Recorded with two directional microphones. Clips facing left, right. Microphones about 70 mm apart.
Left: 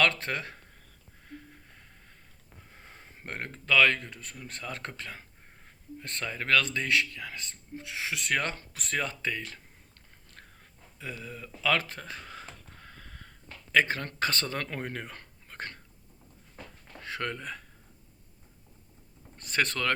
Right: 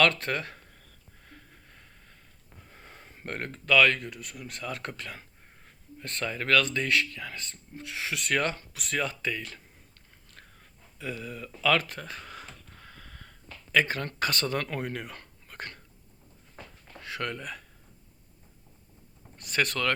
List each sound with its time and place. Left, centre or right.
0.0 s speech: left
2.7 s speech: centre; by 9.6 s left
11.0 s a sound: left
13.7 s speech: left
17.0 s speech: left
19.4 s speech: left